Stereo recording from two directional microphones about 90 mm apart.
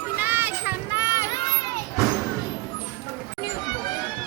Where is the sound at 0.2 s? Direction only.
20° right (ahead or behind).